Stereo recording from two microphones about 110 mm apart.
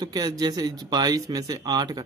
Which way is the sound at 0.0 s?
40° right (ahead or behind).